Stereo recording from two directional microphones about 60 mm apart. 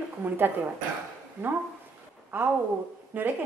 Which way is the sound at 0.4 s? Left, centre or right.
Right.